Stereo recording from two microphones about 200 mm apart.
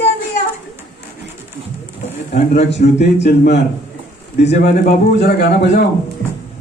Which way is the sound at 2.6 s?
60° left (ahead or behind).